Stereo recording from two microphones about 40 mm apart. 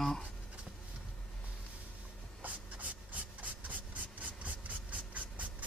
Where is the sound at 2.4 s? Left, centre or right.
Right.